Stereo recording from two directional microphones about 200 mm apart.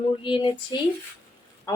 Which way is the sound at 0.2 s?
25° left (ahead or behind).